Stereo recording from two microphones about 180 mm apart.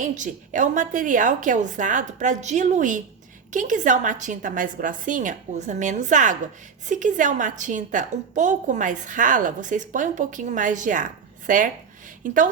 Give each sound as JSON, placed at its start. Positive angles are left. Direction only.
{"t": 0.0, "sound": "a woman's voice", "side_deg": -45}